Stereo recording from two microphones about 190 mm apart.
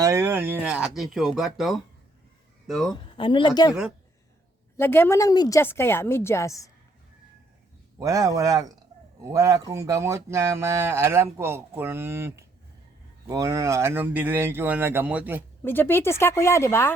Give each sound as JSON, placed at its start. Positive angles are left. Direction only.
{"t": 0.0, "sound": "a man's voice", "side_deg": -15}
{"t": 2.9, "sound": "speech", "side_deg": 25}
{"t": 4.8, "sound": "a woman's voice", "side_deg": 10}
{"t": 7.9, "sound": "speech", "side_deg": -15}
{"t": 15.6, "sound": "a woman's voice", "side_deg": 10}